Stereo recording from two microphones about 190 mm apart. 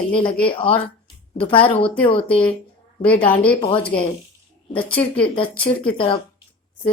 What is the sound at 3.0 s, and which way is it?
Speech, 10° left (ahead or behind).